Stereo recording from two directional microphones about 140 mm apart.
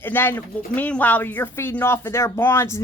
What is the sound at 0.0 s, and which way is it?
Speech, 15° left (ahead or behind).